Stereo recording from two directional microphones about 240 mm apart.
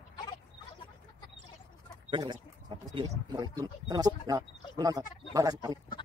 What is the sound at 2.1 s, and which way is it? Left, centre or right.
Chicken, centre.